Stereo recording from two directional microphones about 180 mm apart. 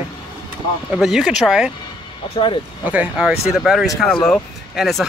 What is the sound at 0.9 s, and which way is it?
Speech, centre (ahead or behind).